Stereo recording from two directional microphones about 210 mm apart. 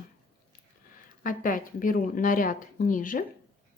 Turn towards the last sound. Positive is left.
turn(degrees=40)  # may be behind; listen again after turning